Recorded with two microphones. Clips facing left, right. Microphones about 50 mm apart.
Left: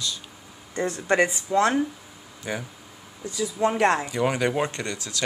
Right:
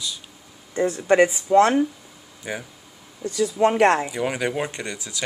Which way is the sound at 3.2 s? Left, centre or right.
Right.